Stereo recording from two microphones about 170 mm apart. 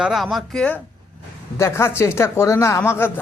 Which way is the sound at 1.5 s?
15° left (ahead or behind).